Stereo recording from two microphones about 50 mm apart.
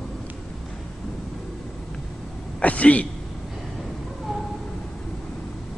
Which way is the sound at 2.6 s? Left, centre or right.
Left.